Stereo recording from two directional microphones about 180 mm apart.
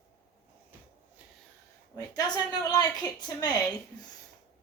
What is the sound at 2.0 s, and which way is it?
A woman's voice, 20° left (ahead or behind).